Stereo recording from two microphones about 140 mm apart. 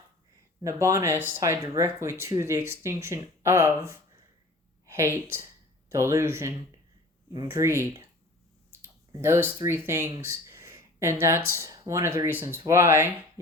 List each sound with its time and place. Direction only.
0.6 s a woman's voice: 20° right (ahead or behind)
8.7 s speech: 15° right (ahead or behind)